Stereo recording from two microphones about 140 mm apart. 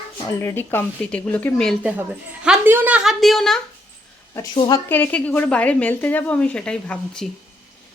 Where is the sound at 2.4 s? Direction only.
10° right (ahead or behind).